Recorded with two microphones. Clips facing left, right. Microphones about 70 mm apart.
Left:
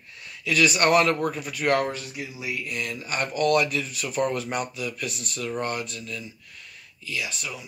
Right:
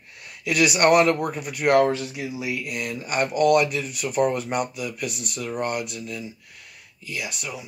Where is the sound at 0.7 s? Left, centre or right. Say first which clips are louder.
Right 6 dB; centre.